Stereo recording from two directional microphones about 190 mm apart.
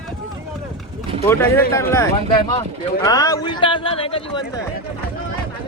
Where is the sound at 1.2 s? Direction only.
15° left (ahead or behind).